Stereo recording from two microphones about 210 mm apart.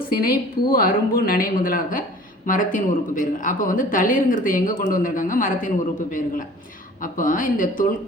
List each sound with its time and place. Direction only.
0.7 s a woman's voice: 45° left (ahead or behind)